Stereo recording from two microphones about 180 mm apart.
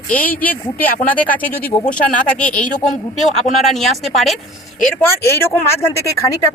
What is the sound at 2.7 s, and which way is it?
Speech, 45° left (ahead or behind).